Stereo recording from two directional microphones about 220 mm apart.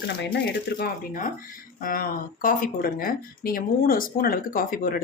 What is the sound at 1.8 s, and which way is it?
Speech, 40° left (ahead or behind).